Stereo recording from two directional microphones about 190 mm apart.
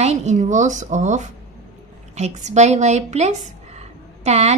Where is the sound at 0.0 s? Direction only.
35° right (ahead or behind).